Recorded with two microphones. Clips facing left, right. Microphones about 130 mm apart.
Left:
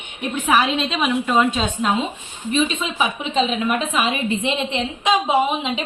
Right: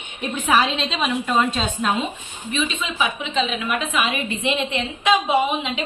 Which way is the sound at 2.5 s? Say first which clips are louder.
Left 4 dB; 40° left (ahead or behind).